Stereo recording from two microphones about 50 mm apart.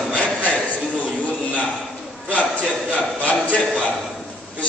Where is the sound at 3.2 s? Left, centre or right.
Left.